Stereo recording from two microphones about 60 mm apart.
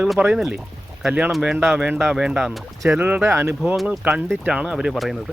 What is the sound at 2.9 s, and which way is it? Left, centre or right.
Speech, right.